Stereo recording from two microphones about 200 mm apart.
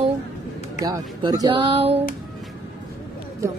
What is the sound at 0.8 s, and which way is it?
A woman's voice, 15° right (ahead or behind).